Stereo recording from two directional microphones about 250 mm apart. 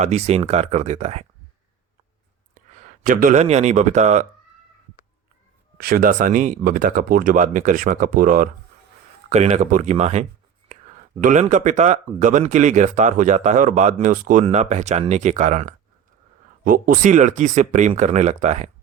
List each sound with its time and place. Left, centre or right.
0.0 s speech: right
2.6 s speech: right
5.7 s speech: right